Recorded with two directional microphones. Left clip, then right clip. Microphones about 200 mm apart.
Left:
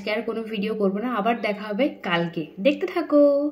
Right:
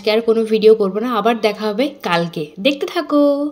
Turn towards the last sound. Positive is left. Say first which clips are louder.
# right 3 dB
turn(degrees=-40)  # may be behind; listen again after turning